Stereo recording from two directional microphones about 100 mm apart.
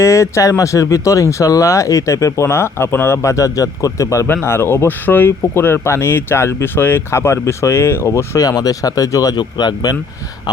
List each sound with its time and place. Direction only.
0.0 s speech: 30° left (ahead or behind)